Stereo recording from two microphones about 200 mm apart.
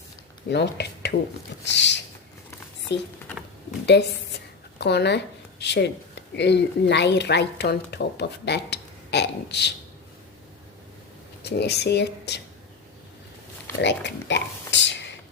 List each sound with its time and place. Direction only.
0.5 s a woman's voice: 60° left (ahead or behind)
4.8 s a woman's voice: 55° left (ahead or behind)
11.4 s a woman's voice: 55° left (ahead or behind)
13.8 s a sound: 60° left (ahead or behind)